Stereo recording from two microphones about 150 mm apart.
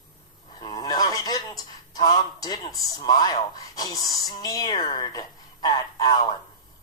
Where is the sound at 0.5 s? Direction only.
25° left (ahead or behind).